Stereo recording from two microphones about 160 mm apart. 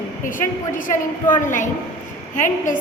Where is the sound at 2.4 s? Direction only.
55° left (ahead or behind).